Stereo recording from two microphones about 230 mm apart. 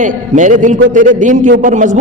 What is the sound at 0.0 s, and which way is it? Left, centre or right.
A man's voice, right.